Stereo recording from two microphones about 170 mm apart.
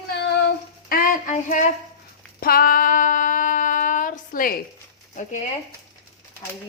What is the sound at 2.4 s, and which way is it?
Female singing, 60° left (ahead or behind).